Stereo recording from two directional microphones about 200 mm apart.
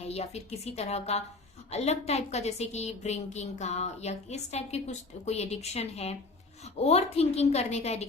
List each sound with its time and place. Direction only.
0.0 s a woman's voice: 30° left (ahead or behind)